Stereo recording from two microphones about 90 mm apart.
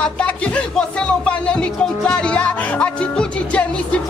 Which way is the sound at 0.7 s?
10° left (ahead or behind).